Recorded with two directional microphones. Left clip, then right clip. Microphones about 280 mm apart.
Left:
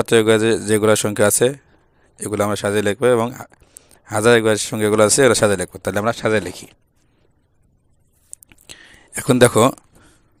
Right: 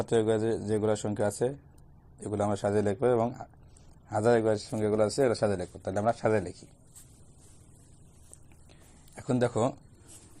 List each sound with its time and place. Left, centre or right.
0.0 s speech: left
4.0 s a man's voice: left
9.1 s speech: left